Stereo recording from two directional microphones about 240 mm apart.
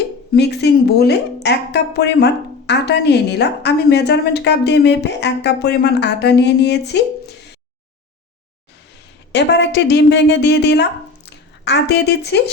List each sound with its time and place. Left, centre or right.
0.3 s speech: left
9.3 s a woman's voice: left